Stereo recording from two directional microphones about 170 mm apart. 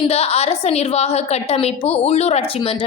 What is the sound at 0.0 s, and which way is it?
A woman's voice, 35° left (ahead or behind).